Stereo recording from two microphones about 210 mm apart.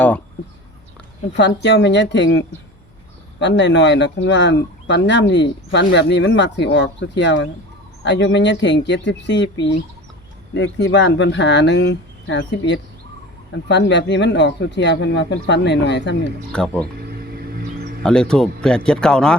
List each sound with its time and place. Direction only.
1.4 s speech: 55° left (ahead or behind)
16.5 s speech: 5° left (ahead or behind)
17.1 s music: 50° right (ahead or behind)
18.0 s speech: 5° left (ahead or behind)